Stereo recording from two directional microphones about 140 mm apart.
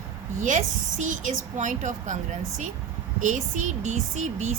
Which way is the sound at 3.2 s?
60° right (ahead or behind).